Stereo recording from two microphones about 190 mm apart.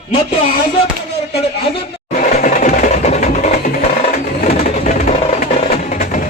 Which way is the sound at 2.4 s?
40° left (ahead or behind).